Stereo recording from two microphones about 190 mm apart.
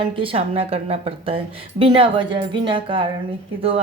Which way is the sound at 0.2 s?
30° right (ahead or behind).